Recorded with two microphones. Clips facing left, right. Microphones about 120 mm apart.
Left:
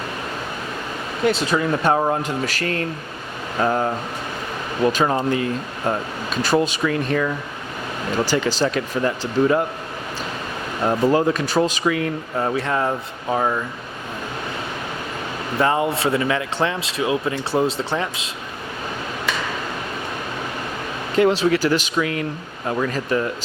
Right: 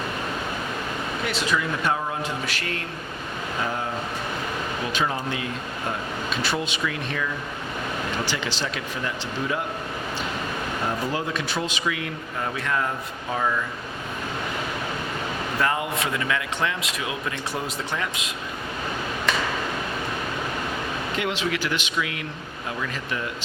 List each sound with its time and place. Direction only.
1.5 s speech: 35° left (ahead or behind)
4.9 s speech: 40° left (ahead or behind)
6.3 s speech: 40° left (ahead or behind)
10.8 s speech: 45° left (ahead or behind)
15.5 s speech: 30° left (ahead or behind)
21.2 s speech: 35° left (ahead or behind)